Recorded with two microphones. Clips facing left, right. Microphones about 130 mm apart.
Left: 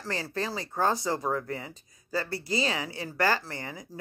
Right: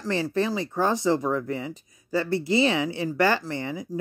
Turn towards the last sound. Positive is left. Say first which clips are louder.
# right 6 dB
turn(degrees=-20)  # may be behind; listen again after turning